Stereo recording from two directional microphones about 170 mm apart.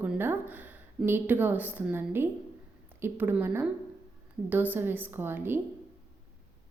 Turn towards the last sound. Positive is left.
turn(degrees=-10)  # may be behind; listen again after turning